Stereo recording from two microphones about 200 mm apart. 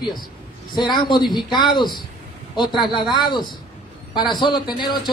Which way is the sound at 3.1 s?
20° left (ahead or behind).